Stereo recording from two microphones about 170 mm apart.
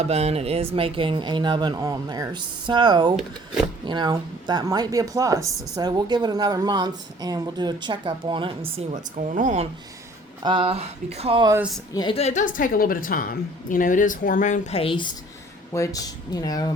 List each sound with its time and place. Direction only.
0.0 s speech: 40° right (ahead or behind)
8.9 s speech: 45° right (ahead or behind)
10.4 s speech: 30° right (ahead or behind)
11.9 s a woman's voice: 30° left (ahead or behind)
15.7 s speech: 20° left (ahead or behind)